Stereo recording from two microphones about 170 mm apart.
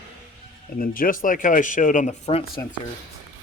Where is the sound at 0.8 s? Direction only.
55° left (ahead or behind).